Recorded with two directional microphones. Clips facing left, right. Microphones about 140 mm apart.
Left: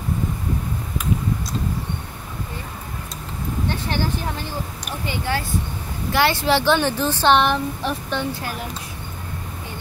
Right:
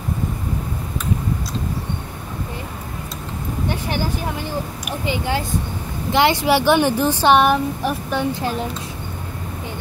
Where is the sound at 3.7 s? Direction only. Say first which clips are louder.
Right 2 dB; 15° right (ahead or behind).